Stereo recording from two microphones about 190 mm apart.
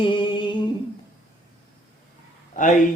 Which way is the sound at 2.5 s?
40° left (ahead or behind).